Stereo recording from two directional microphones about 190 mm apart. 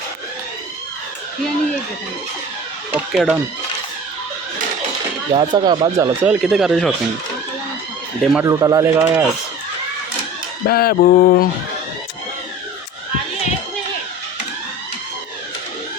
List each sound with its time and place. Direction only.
2.9 s speech: centre (ahead or behind)
5.3 s speech: 25° right (ahead or behind)
6.2 s speech: 5° right (ahead or behind)
8.2 s speech: centre (ahead or behind)
8.4 s speech: 20° right (ahead or behind)
10.7 s a sound: 55° left (ahead or behind)